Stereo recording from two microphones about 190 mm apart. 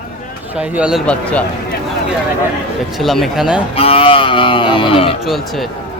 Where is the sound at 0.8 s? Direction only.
5° right (ahead or behind).